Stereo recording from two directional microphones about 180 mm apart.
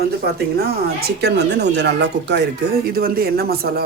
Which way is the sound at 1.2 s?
70° right (ahead or behind).